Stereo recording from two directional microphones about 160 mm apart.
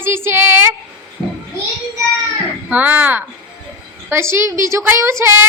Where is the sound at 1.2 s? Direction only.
25° right (ahead or behind).